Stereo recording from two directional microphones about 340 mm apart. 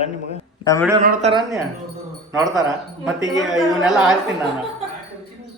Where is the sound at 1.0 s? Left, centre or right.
Right.